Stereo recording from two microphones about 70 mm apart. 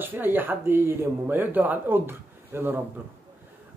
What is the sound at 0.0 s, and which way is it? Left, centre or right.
Speech, right.